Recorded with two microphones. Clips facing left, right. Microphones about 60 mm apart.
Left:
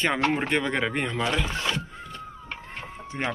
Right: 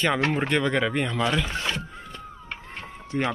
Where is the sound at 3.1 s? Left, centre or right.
Centre.